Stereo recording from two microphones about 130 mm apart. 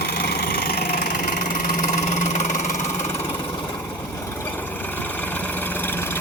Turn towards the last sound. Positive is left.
turn(degrees=15)  # may be behind; listen again after turning